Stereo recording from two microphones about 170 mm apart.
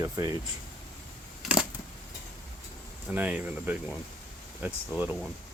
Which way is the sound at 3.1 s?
10° right (ahead or behind).